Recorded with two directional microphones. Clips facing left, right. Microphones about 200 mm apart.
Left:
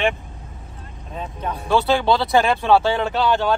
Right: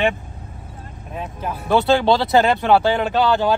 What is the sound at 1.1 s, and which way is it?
Speech, 5° right (ahead or behind).